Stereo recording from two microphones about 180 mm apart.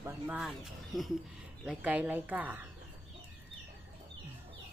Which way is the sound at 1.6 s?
5° right (ahead or behind).